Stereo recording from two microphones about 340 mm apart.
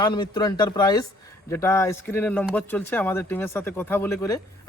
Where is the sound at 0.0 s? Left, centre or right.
Centre.